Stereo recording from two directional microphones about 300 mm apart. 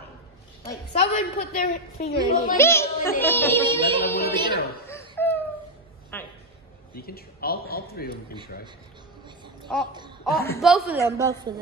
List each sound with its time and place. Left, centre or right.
0.7 s a woman's voice: left
2.5 s speech: centre
3.9 s music: centre
4.8 s a sound: centre
7.0 s a man's voice: left
9.7 s a woman's voice: centre